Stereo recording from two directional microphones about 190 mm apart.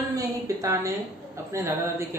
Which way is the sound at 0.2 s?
15° right (ahead or behind).